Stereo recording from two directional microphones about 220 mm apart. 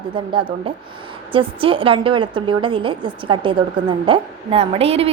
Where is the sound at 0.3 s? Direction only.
25° right (ahead or behind).